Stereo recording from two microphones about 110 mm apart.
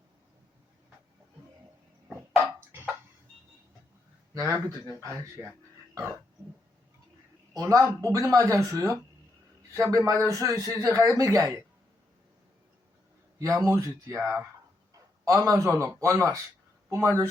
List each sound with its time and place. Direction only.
2.0 s a sound: 15° right (ahead or behind)
4.4 s a man's voice: 30° right (ahead or behind)
7.5 s a man's voice: 35° right (ahead or behind)
13.4 s speech: 25° right (ahead or behind)
14.9 s a sound: 30° right (ahead or behind)
15.4 s speech: 30° right (ahead or behind)